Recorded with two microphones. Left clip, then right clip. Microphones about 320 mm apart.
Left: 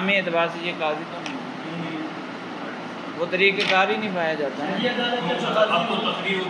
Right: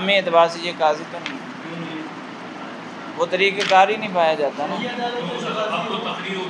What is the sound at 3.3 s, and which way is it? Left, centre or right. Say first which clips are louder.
Speech: right 1 dB; right.